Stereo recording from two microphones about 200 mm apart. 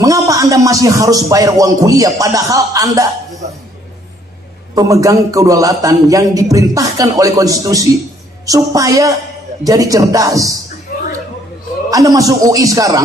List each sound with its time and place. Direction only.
0.0 s a man's voice: 15° right (ahead or behind)
4.7 s a man's voice: 15° right (ahead or behind)
10.9 s a sound: 45° left (ahead or behind)
11.9 s a man's voice: 15° right (ahead or behind)